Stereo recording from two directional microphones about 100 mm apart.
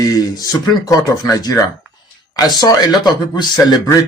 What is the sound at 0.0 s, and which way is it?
Speech, 40° left (ahead or behind).